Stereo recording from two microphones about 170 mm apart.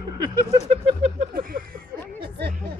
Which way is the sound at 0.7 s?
35° right (ahead or behind).